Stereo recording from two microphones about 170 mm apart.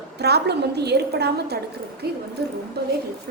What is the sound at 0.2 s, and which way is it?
A woman's voice, 75° right (ahead or behind).